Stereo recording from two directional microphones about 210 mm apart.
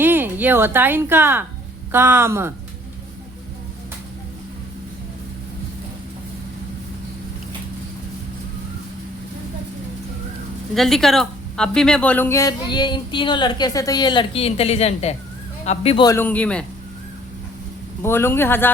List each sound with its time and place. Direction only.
0.0 s a woman's voice: 10° right (ahead or behind)
10.8 s a woman's voice: centre (ahead or behind); by 16.0 s 30° left (ahead or behind)
16.0 s speech: 10° left (ahead or behind)
18.0 s speech: 10° left (ahead or behind)